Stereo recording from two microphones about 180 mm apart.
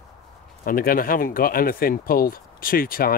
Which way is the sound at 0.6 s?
55° left (ahead or behind).